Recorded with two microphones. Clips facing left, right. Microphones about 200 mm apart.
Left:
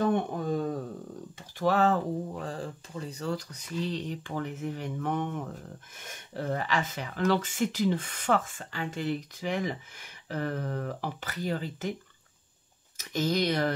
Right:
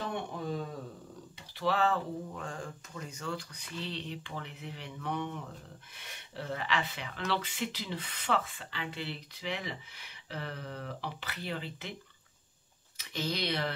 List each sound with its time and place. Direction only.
0.0 s a sound: 50° left (ahead or behind)
1.6 s speech: 45° left (ahead or behind)
12.9 s speech: 45° left (ahead or behind)